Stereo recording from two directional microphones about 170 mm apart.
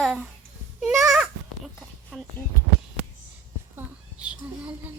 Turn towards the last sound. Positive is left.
turn(degrees=-5)  # may be behind; listen again after turning